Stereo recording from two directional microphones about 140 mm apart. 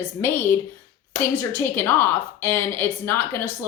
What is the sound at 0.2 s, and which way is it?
A woman's voice, 15° left (ahead or behind).